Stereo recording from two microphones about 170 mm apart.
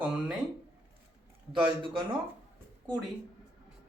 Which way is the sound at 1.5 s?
30° right (ahead or behind).